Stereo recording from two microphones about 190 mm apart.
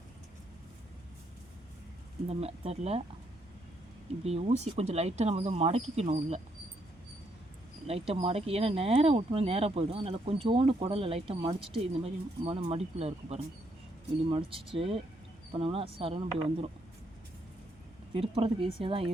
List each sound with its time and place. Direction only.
2.2 s speech: 35° right (ahead or behind)
4.2 s speech: 35° right (ahead or behind)
7.9 s speech: 30° right (ahead or behind)
18.1 s speech: 30° right (ahead or behind)